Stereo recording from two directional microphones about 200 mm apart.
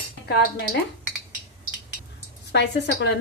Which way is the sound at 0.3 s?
55° left (ahead or behind).